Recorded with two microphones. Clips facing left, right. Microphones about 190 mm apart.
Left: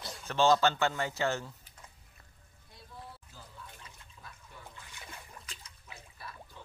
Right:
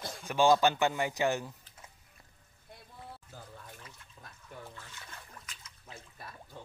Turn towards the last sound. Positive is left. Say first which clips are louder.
# right 1 dB
turn(degrees=-50)  # may be behind; listen again after turning